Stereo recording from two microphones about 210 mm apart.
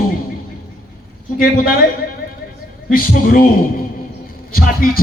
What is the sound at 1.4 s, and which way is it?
Speech, 45° left (ahead or behind).